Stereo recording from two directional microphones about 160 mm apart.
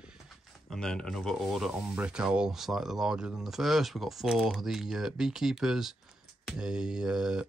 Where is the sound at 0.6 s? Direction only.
5° left (ahead or behind).